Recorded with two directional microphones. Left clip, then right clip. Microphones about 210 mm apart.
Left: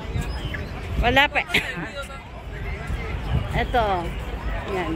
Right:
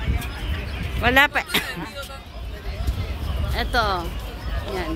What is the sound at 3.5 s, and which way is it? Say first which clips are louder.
Speech: even; 5° right (ahead or behind).